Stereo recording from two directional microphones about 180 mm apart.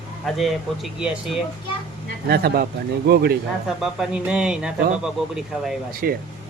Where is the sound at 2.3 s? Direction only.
60° right (ahead or behind).